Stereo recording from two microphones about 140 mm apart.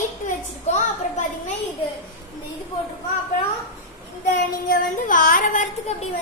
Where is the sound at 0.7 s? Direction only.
60° left (ahead or behind).